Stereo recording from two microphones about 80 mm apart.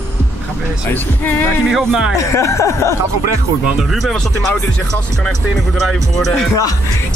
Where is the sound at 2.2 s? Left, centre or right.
Left.